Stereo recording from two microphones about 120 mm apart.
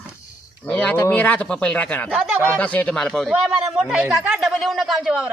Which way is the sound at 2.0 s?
5° right (ahead or behind).